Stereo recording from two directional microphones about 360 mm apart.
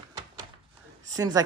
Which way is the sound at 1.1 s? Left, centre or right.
Centre.